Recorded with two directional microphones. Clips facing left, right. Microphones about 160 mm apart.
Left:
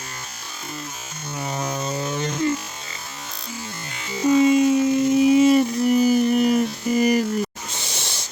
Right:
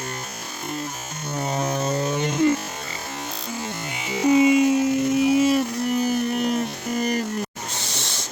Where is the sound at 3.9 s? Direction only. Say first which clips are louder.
Even; 15° right (ahead or behind); by 7.2 s 5° left (ahead or behind).